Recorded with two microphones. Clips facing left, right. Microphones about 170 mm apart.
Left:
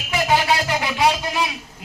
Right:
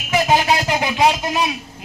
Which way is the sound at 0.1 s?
20° right (ahead or behind).